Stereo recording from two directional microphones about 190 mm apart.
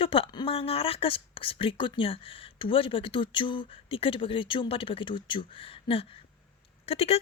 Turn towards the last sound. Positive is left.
turn(degrees=30)  # may be behind; listen again after turning